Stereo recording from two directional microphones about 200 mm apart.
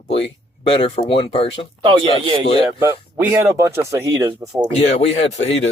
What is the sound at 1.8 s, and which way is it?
Speech, 25° right (ahead or behind).